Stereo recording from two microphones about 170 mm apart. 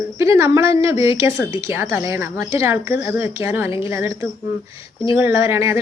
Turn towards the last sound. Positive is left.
turn(degrees=-15)  # may be behind; listen again after turning